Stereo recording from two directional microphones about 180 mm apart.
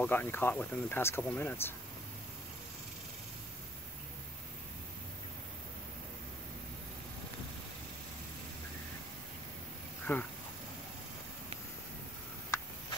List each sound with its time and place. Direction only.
0.0 s speech: 10° left (ahead or behind)
10.1 s speech: 10° left (ahead or behind)